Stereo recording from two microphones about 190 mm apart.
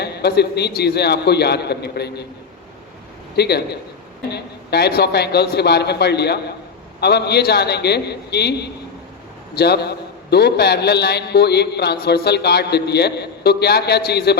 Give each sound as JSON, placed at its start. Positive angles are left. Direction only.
{"t": 0.0, "sound": "a man's voice", "side_deg": 60}
{"t": 3.3, "sound": "a man's voice", "side_deg": 60}